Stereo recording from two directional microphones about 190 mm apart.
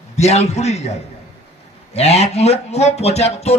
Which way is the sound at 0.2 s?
35° left (ahead or behind).